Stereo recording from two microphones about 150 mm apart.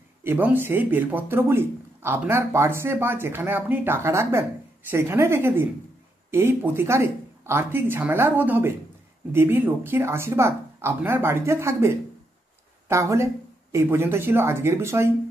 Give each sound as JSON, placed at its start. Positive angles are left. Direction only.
{"t": 0.2, "sound": "speech", "side_deg": -15}